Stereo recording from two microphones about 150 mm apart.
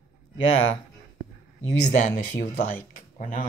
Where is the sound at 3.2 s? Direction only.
60° left (ahead or behind).